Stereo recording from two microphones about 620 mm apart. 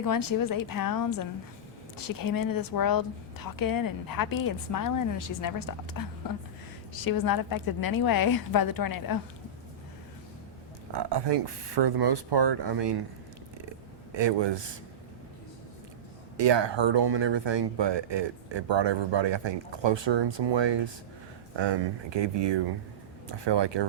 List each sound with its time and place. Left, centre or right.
0.0 s a woman's voice: left
10.9 s speech: right
14.1 s speech: right
16.4 s speech: right